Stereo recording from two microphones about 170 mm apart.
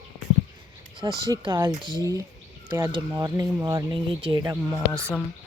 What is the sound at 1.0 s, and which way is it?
Speech, 20° right (ahead or behind).